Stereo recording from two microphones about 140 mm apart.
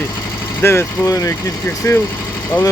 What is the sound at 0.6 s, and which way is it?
Speech, 15° left (ahead or behind).